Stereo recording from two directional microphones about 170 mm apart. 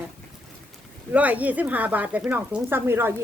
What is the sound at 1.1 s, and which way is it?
A woman's voice, 10° right (ahead or behind).